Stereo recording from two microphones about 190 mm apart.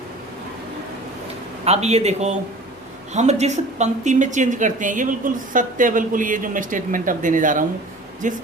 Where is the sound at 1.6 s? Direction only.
35° right (ahead or behind).